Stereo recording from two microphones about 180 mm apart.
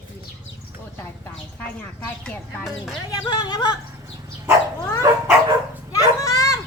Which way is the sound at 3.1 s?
25° left (ahead or behind).